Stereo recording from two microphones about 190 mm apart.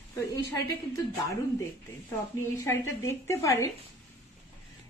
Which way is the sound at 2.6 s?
15° left (ahead or behind).